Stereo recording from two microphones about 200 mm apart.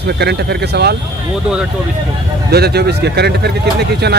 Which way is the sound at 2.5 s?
55° right (ahead or behind).